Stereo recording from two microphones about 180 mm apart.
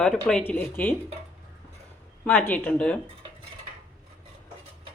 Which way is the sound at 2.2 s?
10° left (ahead or behind).